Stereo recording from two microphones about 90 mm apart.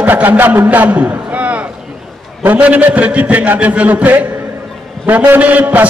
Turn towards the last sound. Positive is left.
turn(degrees=-15)  # may be behind; listen again after turning